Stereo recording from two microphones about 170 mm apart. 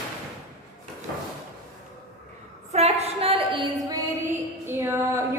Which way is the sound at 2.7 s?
40° right (ahead or behind).